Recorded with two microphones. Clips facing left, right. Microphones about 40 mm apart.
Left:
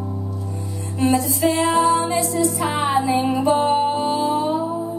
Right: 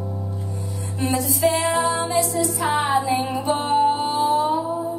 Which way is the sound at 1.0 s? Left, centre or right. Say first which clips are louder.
Left 3 dB; left.